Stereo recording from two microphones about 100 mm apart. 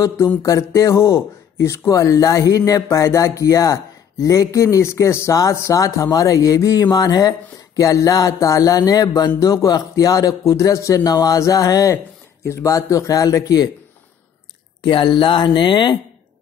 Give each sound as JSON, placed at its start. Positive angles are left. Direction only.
{"t": 0.4, "sound": "speech", "side_deg": 30}
{"t": 14.8, "sound": "speech", "side_deg": 50}